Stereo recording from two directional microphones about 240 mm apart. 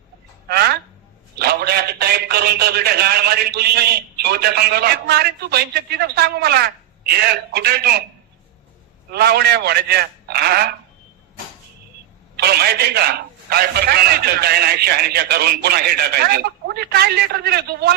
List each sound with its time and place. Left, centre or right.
0.4 s a sound: right
1.4 s a man's voice: right
9.0 s a man's voice: right
12.4 s a man's voice: right